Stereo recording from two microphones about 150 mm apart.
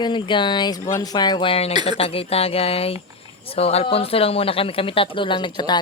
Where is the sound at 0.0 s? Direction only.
30° left (ahead or behind).